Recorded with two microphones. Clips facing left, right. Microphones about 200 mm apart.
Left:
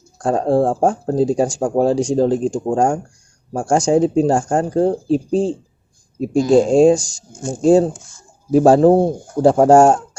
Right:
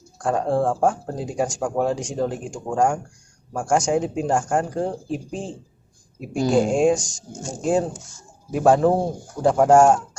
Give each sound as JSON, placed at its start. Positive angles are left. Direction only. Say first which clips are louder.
{"t": 0.2, "sound": "speech", "louder": "left 5 dB", "side_deg": 35}
{"t": 7.9, "sound": "speech", "louder": "right 2 dB", "side_deg": 55}
{"t": 8.5, "sound": "speech", "louder": "left 7 dB", "side_deg": 35}